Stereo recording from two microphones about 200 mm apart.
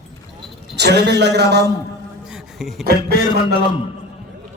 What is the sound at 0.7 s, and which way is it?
Speech, 55° right (ahead or behind).